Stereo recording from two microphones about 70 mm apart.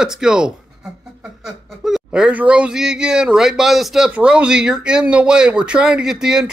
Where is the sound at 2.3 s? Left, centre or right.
Centre.